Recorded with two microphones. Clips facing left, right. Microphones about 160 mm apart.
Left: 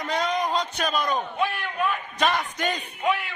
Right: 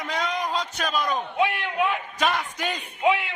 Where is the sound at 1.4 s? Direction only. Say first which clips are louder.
Right 2 dB; 20° right (ahead or behind).